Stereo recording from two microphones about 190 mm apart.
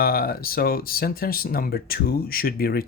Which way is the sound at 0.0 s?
50° left (ahead or behind).